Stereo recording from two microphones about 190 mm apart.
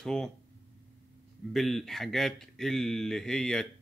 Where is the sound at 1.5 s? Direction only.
Centre (ahead or behind).